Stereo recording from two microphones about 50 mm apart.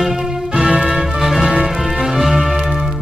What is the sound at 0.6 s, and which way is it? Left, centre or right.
Music, right.